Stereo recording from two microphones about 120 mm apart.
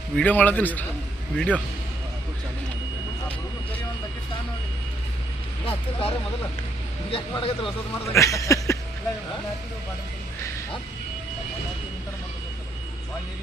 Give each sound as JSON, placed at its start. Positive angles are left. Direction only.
{"t": 0.2, "sound": "a man's voice", "side_deg": 15}
{"t": 5.6, "sound": "speech", "side_deg": 50}
{"t": 8.1, "sound": "speech", "side_deg": 25}